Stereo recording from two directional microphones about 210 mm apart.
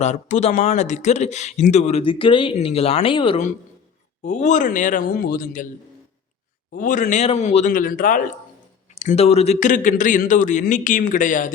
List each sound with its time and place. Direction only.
0.0 s speech: 35° left (ahead or behind)
6.7 s speech: 40° left (ahead or behind)